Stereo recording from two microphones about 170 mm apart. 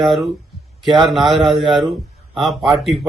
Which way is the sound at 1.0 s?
Centre (ahead or behind).